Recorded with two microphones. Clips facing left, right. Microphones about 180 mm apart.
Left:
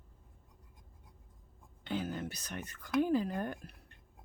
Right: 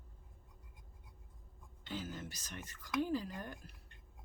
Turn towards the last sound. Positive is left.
turn(degrees=60)  # may be behind; listen again after turning